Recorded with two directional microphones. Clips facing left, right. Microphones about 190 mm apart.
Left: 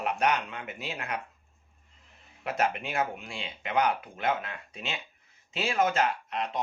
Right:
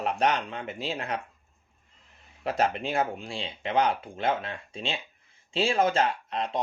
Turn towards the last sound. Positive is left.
turn(degrees=-30)  # may be behind; listen again after turning